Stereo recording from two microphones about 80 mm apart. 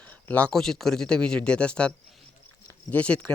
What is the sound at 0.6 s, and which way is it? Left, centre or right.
Speech, centre.